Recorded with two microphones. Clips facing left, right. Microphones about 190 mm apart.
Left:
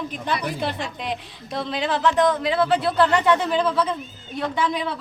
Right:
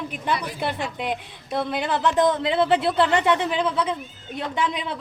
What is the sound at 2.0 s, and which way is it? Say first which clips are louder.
A woman's voice: left 1 dB; 20° right (ahead or behind).